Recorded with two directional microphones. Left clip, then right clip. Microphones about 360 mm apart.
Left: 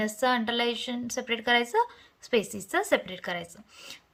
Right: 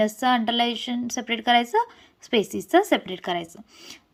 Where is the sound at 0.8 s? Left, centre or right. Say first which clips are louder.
Right 3 dB; centre.